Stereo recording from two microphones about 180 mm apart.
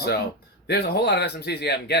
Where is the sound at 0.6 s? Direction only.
65° left (ahead or behind).